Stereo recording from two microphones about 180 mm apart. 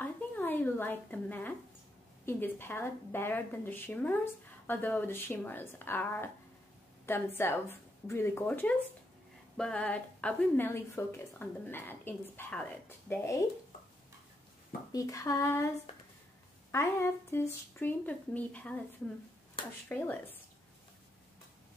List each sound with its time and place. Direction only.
0.0 s a sound: 10° left (ahead or behind)
2.2 s speech: 10° left (ahead or behind)
7.3 s speech: 10° left (ahead or behind)
14.9 s speech: 20° left (ahead or behind)
16.7 s speech: 15° left (ahead or behind)
19.9 s speech: 10° left (ahead or behind)